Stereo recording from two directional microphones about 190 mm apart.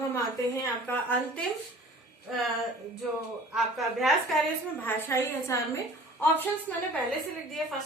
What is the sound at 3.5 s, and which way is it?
Speech, centre (ahead or behind).